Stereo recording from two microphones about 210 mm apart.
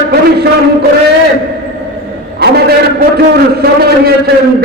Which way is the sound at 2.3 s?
50° right (ahead or behind).